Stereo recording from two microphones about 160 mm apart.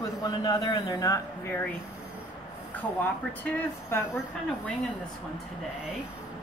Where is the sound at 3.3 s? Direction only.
15° left (ahead or behind).